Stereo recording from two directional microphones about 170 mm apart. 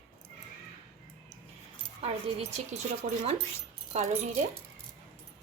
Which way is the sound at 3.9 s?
45° right (ahead or behind).